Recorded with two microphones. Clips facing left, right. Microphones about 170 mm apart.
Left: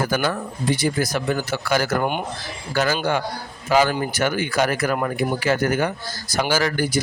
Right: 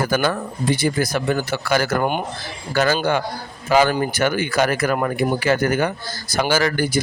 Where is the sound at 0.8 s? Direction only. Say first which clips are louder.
Right 2 dB; 55° right (ahead or behind).